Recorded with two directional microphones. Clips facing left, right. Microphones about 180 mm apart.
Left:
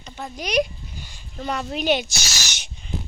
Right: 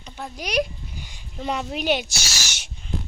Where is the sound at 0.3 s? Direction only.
5° right (ahead or behind).